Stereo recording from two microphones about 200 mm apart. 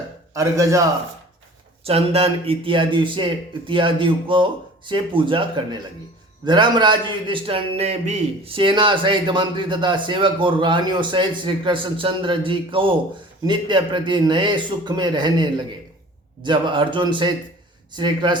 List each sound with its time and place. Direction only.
0.3 s a man's voice: 15° right (ahead or behind)
1.8 s a man's voice: 30° right (ahead or behind)